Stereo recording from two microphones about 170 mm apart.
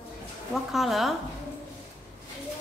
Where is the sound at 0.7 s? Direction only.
Centre (ahead or behind).